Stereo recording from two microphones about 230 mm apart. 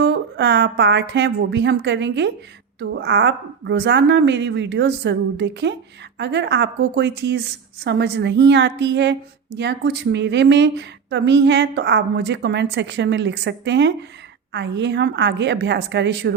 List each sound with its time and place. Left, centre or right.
0.0 s a woman's voice: right